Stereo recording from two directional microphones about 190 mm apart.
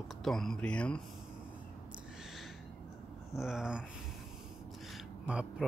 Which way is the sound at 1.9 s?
5° right (ahead or behind).